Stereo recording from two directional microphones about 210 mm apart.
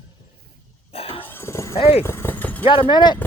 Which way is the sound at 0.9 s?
25° left (ahead or behind).